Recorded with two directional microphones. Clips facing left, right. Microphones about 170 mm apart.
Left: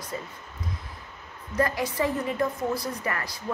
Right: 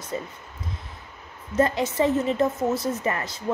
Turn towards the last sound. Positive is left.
turn(degrees=-25)  # may be behind; listen again after turning